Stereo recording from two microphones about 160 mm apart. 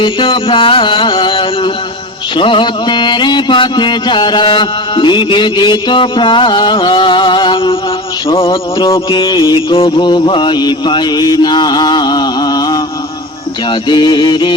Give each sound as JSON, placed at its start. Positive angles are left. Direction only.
{"t": 0.0, "sound": "music", "side_deg": 30}